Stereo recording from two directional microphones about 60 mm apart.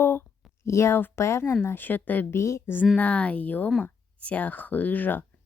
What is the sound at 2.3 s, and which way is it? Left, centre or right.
Speech, left.